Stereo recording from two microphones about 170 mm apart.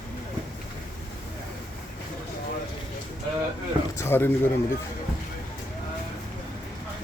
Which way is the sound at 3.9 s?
15° left (ahead or behind).